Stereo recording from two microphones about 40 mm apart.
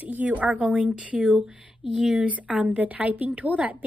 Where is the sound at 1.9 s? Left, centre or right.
Centre.